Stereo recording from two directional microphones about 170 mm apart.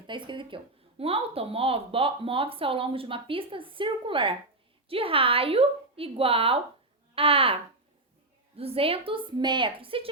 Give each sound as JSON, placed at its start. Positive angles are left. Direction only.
{"t": 0.1, "sound": "speech", "side_deg": -30}